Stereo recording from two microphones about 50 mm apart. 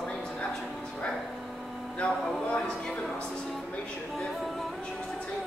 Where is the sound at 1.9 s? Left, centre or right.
Left.